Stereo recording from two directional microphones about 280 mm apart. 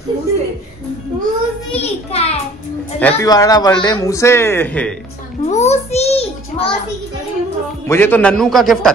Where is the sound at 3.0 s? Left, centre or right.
Centre.